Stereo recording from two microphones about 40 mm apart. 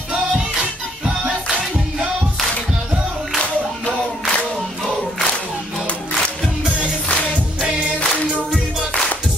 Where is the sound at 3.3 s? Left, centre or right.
Left.